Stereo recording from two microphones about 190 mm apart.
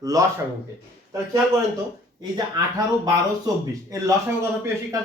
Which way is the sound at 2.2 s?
20° right (ahead or behind).